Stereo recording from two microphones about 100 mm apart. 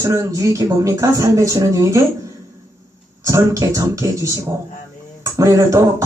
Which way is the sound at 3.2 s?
30° right (ahead or behind).